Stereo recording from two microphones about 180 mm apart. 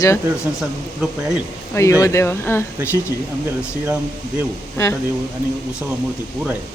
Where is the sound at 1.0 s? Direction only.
5° right (ahead or behind).